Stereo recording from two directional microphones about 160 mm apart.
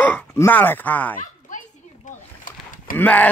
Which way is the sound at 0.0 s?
10° left (ahead or behind).